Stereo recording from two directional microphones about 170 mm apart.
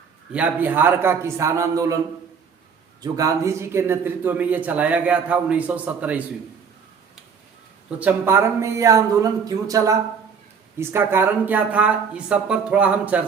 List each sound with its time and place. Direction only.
0.3 s a man's voice: 10° right (ahead or behind)
3.0 s a man's voice: 20° right (ahead or behind)
7.9 s a man's voice: 10° right (ahead or behind)